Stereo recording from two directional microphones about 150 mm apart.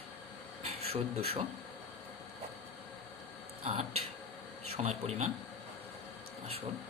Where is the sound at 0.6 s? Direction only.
45° right (ahead or behind).